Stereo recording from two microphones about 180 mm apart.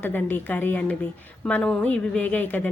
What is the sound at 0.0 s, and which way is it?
Speech, 10° left (ahead or behind).